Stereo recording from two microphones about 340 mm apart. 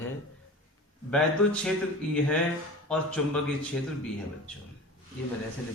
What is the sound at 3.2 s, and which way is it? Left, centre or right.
Speech, centre.